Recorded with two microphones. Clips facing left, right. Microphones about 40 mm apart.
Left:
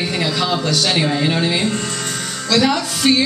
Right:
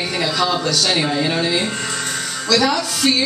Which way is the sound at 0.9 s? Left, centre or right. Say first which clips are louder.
Left 2 dB; centre.